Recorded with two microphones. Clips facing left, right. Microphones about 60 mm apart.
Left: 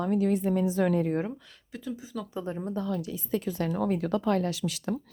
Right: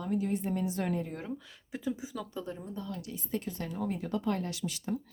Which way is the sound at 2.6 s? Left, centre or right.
Left.